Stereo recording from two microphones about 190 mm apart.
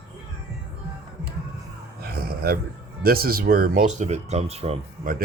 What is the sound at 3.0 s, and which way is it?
Speech, 50° right (ahead or behind).